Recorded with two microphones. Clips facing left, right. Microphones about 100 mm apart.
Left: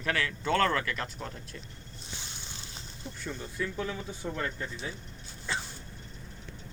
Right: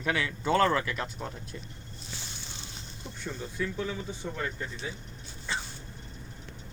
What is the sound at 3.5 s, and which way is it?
Speech, centre (ahead or behind).